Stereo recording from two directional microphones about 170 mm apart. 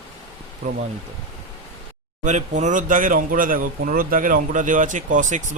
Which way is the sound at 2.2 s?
45° right (ahead or behind).